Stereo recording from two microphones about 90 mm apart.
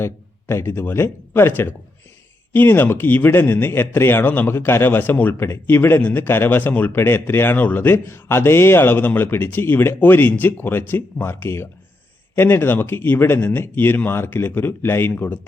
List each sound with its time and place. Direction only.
0.0 s speech: 25° left (ahead or behind)